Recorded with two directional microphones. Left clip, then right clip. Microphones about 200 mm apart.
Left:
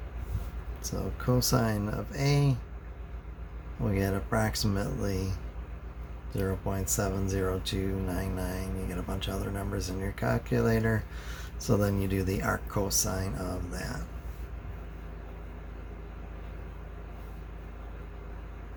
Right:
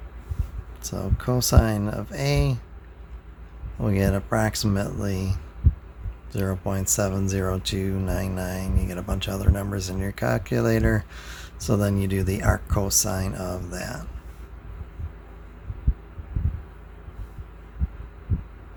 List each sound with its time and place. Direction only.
0.8 s speech: 45° right (ahead or behind)
3.8 s speech: 50° right (ahead or behind)